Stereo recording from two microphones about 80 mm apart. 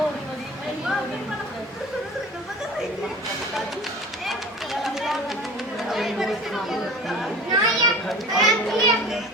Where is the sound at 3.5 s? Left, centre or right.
Centre.